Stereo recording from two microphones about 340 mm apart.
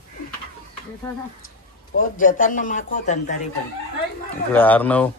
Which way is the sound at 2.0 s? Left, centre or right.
Left.